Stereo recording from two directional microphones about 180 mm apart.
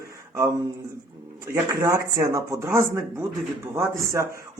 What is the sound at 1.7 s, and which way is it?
Speech, 20° right (ahead or behind).